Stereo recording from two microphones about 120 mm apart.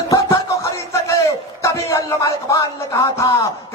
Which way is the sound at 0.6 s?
25° left (ahead or behind).